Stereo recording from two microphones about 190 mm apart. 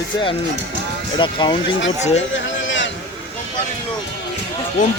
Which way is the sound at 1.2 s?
25° left (ahead or behind).